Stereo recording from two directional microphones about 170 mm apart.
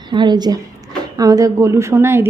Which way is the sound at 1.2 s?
20° right (ahead or behind).